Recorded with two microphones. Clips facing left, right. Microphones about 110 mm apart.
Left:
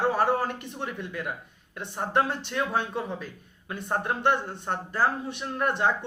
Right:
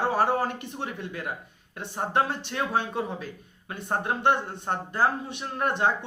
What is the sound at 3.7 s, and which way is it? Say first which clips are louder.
Speech: even; 20° right (ahead or behind).